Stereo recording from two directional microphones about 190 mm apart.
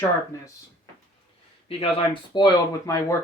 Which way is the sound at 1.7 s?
30° left (ahead or behind).